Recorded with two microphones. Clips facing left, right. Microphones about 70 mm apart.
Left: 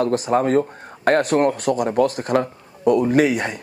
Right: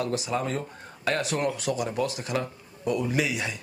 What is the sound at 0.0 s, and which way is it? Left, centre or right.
Speech, left.